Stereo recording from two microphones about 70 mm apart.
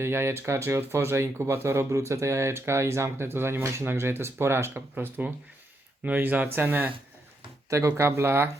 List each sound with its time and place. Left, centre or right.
0.0 s speech: right
5.2 s speech: right
7.7 s speech: right